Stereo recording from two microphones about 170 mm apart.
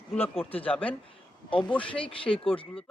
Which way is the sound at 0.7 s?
10° left (ahead or behind).